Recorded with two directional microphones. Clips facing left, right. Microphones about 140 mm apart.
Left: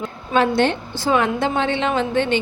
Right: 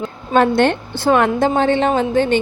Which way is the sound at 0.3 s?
55° right (ahead or behind).